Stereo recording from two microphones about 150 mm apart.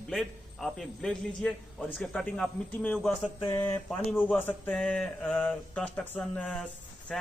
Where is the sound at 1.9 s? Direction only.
5° left (ahead or behind).